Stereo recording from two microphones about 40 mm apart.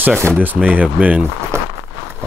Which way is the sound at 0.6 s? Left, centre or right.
Right.